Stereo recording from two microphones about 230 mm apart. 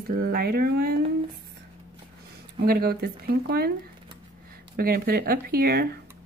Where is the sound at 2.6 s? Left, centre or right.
Right.